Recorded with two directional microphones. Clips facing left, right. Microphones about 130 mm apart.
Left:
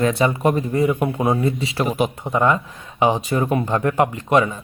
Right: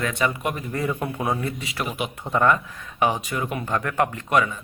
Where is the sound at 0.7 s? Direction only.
20° left (ahead or behind).